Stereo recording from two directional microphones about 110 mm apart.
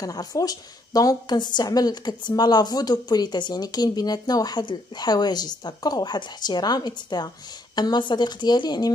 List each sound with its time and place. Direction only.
0.0 s a woman's voice: 35° left (ahead or behind)